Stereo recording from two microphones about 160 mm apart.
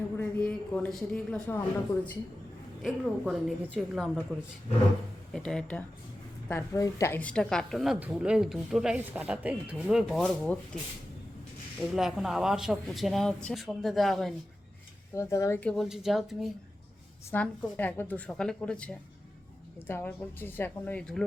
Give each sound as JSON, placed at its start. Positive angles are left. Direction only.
{"t": 0.2, "sound": "a man's voice", "side_deg": 10}
{"t": 2.8, "sound": "speech", "side_deg": 0}
{"t": 5.3, "sound": "speech", "side_deg": 5}
{"t": 6.5, "sound": "speech", "side_deg": 20}
{"t": 11.8, "sound": "speech", "side_deg": 0}
{"t": 15.1, "sound": "speech", "side_deg": 20}
{"t": 15.7, "sound": "speech", "side_deg": 0}
{"t": 17.3, "sound": "speech", "side_deg": 10}